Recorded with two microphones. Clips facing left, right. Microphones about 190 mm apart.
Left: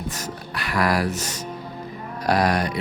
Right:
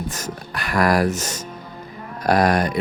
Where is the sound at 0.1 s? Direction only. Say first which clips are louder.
Right 1 dB; 45° right (ahead or behind).